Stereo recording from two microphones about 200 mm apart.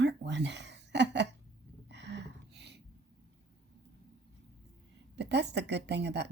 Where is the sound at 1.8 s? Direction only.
60° right (ahead or behind).